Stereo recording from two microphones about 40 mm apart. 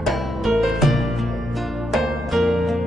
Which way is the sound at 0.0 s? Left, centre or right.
Centre.